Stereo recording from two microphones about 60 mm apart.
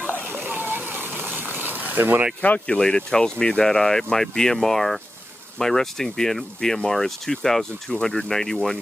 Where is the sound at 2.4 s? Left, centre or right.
Left.